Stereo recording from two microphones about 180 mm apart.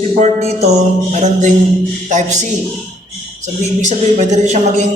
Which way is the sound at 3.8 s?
40° right (ahead or behind).